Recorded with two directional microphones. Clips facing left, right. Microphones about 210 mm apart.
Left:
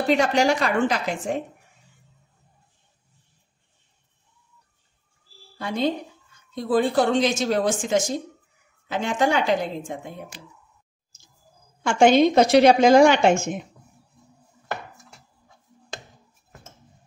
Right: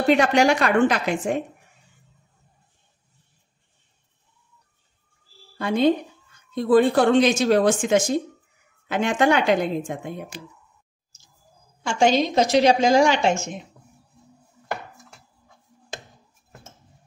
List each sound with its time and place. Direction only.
0.1 s speech: 65° right (ahead or behind)
5.6 s speech: 60° right (ahead or behind)
11.8 s a woman's voice: 55° left (ahead or behind)